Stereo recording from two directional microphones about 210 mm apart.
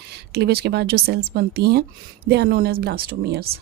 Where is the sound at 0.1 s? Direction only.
50° right (ahead or behind).